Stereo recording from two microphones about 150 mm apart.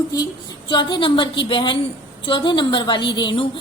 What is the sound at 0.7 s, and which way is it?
A woman's voice, 30° left (ahead or behind).